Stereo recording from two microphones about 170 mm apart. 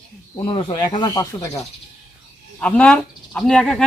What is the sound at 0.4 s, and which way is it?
Speech, 30° left (ahead or behind).